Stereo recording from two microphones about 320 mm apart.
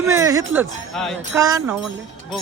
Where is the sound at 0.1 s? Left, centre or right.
Centre.